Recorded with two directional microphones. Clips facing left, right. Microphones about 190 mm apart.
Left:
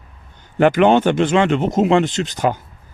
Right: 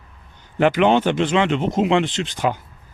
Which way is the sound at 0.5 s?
50° left (ahead or behind).